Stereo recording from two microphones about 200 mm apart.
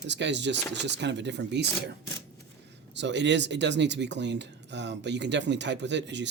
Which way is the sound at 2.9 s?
60° right (ahead or behind).